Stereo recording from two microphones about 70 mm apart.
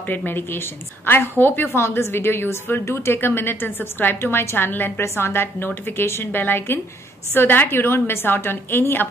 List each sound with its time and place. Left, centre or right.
0.1 s a woman's voice: left